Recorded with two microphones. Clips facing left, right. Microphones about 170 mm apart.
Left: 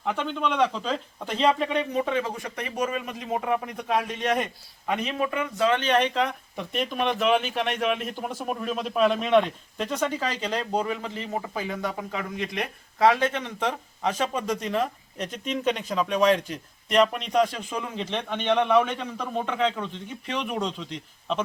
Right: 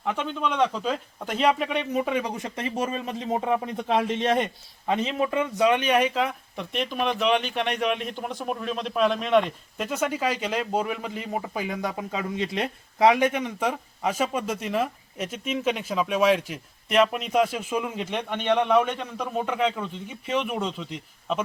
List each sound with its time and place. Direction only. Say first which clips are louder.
0.0 s speech: even; centre (ahead or behind)